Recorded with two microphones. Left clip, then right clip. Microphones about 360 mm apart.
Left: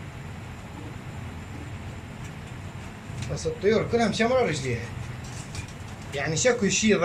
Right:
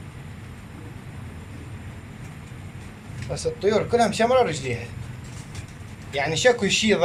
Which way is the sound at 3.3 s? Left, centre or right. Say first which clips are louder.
Right 2 dB; centre.